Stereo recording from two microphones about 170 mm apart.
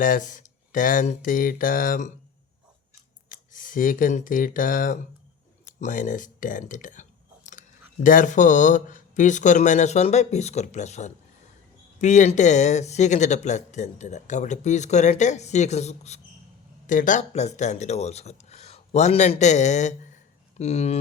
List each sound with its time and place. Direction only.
0.0 s speech: 50° left (ahead or behind)
3.2 s speech: 50° left (ahead or behind)